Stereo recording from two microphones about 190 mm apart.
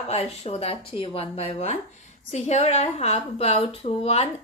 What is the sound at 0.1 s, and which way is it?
A woman's voice, 35° left (ahead or behind).